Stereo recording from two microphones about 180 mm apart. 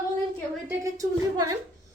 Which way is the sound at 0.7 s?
15° right (ahead or behind).